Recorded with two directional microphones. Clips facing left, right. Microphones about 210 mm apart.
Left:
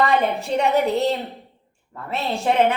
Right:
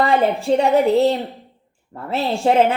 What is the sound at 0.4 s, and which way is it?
Speech, 30° right (ahead or behind).